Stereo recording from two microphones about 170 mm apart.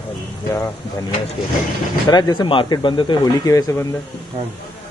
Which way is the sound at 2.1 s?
25° left (ahead or behind).